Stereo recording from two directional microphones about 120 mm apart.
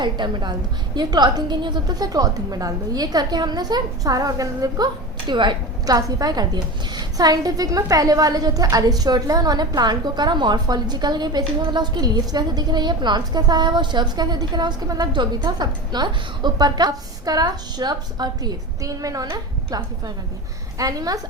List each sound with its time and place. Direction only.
0.0 s a woman's voice: 40° right (ahead or behind)